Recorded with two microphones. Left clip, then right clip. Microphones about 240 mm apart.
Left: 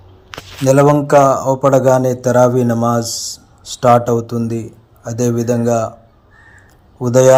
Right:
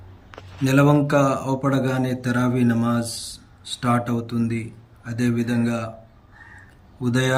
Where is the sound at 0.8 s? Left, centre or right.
Centre.